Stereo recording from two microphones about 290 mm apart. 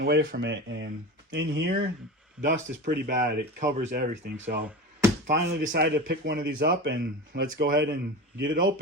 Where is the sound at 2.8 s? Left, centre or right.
Right.